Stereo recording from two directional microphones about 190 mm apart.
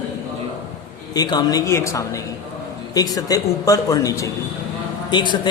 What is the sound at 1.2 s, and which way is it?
Speech, 20° left (ahead or behind).